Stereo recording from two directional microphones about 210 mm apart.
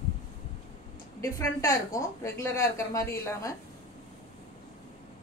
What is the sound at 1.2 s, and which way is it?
A woman's voice, 15° left (ahead or behind).